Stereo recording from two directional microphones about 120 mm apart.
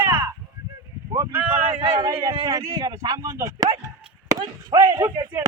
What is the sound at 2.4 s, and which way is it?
Speech, 30° right (ahead or behind).